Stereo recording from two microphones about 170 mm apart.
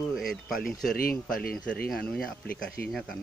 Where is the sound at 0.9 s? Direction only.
60° left (ahead or behind).